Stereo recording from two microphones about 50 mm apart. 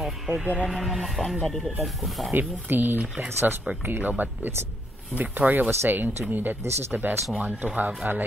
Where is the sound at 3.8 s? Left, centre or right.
Right.